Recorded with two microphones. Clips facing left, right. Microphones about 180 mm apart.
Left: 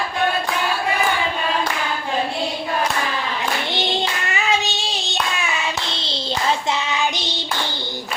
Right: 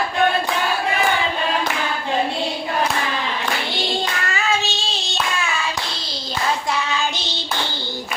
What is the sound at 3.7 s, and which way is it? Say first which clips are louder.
Child singing: left 1 dB; 20° left (ahead or behind).